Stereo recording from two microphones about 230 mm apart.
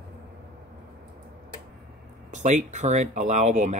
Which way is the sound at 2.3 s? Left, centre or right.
Right.